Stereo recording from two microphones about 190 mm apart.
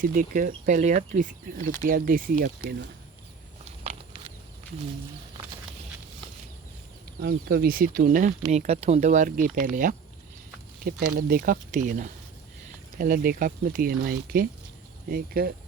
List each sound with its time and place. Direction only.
0.0 s speech: 45° right (ahead or behind)
3.8 s patter: 30° right (ahead or behind)
7.2 s speech: 55° right (ahead or behind)
8.5 s speech: 35° right (ahead or behind)
11.3 s speech: 45° right (ahead or behind)